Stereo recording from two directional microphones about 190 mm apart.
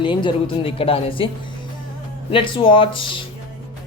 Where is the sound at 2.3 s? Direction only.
25° left (ahead or behind).